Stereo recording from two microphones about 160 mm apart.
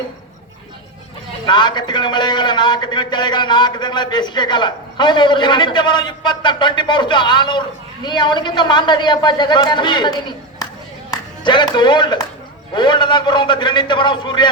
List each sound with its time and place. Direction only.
1.5 s a man's voice: 30° left (ahead or behind)